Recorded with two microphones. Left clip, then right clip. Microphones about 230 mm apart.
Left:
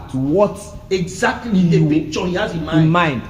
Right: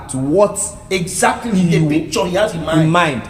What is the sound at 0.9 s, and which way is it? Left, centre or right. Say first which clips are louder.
Speech: right 3 dB; right.